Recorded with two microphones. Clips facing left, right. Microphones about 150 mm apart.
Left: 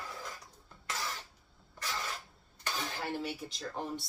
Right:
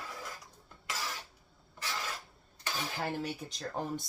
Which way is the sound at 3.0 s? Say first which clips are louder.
Right 2 dB; 45° right (ahead or behind).